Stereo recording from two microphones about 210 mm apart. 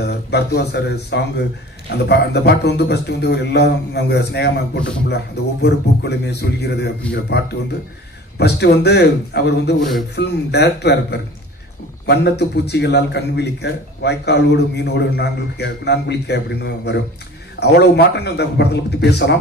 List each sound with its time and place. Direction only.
0.0 s a man's voice: 50° left (ahead or behind)